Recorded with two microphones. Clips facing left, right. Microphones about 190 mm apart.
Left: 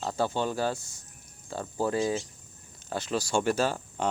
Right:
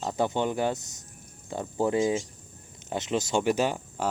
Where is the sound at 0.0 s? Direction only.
20° right (ahead or behind).